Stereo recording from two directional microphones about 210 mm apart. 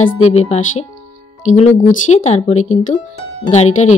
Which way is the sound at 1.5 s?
80° left.